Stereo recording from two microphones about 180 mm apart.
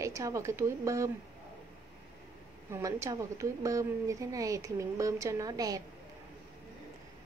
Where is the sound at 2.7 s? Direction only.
15° right (ahead or behind).